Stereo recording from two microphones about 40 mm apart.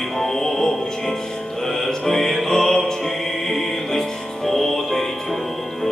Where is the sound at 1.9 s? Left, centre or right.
Centre.